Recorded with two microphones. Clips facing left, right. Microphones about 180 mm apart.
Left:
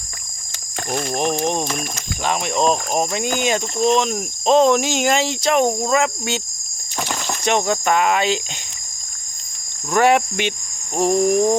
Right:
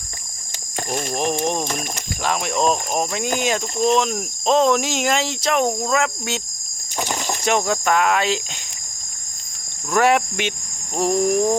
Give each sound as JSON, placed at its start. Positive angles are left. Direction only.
{"t": 1.1, "sound": "speech", "side_deg": 0}
{"t": 7.0, "sound": "a sound", "side_deg": -20}
{"t": 7.4, "sound": "speech", "side_deg": -5}
{"t": 9.9, "sound": "speech", "side_deg": 0}